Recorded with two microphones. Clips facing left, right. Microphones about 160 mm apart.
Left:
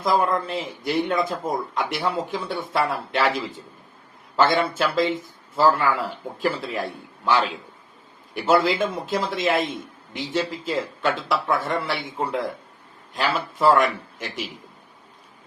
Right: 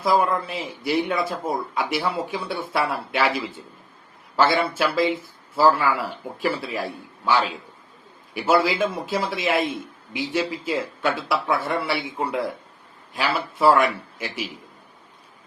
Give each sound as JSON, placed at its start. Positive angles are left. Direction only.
{"t": 0.0, "sound": "a man's voice", "side_deg": -10}